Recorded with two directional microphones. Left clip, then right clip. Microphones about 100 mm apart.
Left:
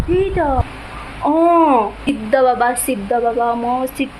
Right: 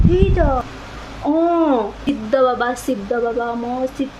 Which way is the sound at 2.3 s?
20° right (ahead or behind).